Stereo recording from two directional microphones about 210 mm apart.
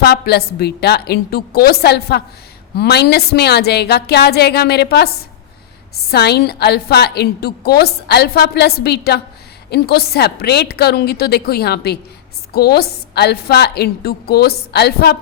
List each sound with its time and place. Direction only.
0.0 s a woman's voice: 50° left (ahead or behind)